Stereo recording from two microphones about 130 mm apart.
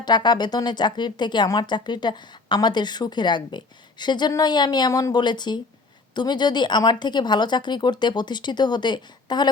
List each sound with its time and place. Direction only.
0.0 s speech: 35° left (ahead or behind)